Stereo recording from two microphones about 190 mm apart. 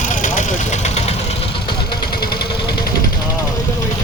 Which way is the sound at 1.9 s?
55° left (ahead or behind).